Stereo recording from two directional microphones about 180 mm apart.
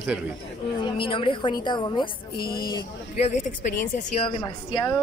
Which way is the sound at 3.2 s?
45° left (ahead or behind).